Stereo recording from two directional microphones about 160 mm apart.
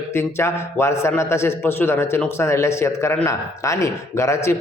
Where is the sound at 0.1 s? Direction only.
15° left (ahead or behind).